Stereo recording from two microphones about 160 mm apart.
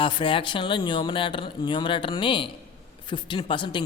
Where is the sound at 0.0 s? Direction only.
30° left (ahead or behind).